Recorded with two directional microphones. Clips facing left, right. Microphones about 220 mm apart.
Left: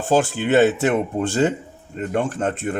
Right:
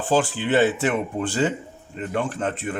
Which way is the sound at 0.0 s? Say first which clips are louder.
Left 3 dB; 45° left (ahead or behind).